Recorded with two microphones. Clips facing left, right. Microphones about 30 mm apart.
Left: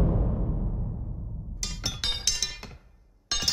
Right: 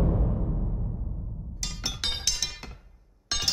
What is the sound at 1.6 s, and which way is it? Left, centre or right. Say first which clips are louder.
Music: even; centre.